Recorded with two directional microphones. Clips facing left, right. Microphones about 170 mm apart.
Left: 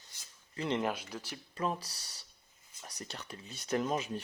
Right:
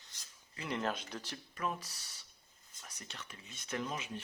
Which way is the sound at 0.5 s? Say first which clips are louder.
Left 7 dB; 35° left (ahead or behind).